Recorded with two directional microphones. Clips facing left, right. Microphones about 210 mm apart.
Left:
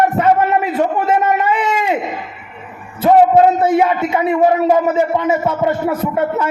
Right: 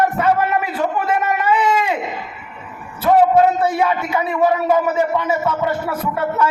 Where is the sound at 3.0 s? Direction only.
25° left (ahead or behind).